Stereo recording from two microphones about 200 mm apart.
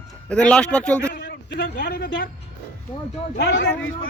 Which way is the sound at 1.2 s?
60° left (ahead or behind).